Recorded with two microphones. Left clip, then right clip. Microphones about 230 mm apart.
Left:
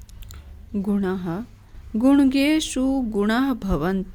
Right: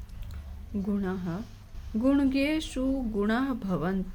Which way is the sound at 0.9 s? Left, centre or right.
Left.